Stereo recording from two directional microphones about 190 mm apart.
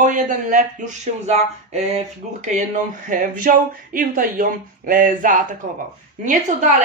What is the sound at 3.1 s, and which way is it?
Speech, 45° right (ahead or behind).